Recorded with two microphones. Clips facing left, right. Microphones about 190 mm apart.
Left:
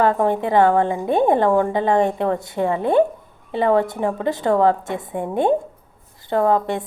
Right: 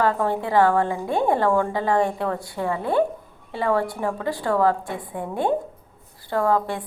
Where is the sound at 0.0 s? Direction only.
20° left (ahead or behind).